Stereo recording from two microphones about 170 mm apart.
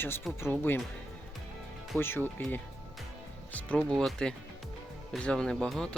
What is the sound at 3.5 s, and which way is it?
Speech, 5° left (ahead or behind).